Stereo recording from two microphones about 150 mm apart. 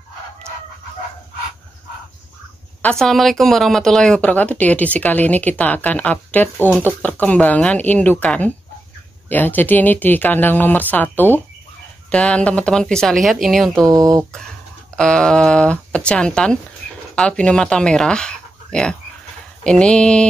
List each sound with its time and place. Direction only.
2.8 s speech: 5° left (ahead or behind)
13.8 s speech: 25° right (ahead or behind)
15.0 s speech: 5° left (ahead or behind)